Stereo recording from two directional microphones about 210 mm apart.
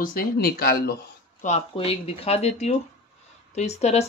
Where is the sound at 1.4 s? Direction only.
30° left (ahead or behind).